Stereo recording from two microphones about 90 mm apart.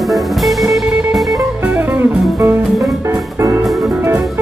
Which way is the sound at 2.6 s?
Centre (ahead or behind).